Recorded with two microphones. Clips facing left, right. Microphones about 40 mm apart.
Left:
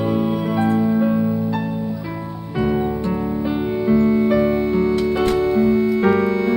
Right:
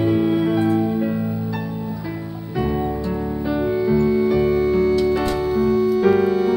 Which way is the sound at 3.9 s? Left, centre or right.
Left.